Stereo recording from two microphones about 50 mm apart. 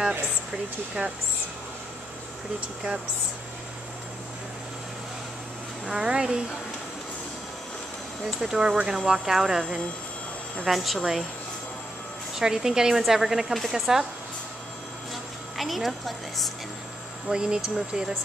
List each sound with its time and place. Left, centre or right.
5.9 s speech: centre
8.4 s a woman's voice: centre
12.4 s speech: centre
15.5 s a woman's voice: centre
17.3 s speech: centre